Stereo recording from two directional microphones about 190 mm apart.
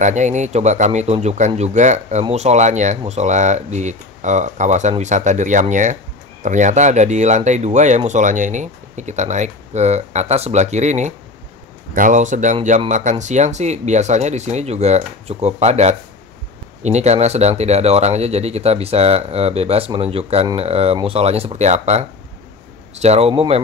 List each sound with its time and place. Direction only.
0.0 s speech: 40° right (ahead or behind)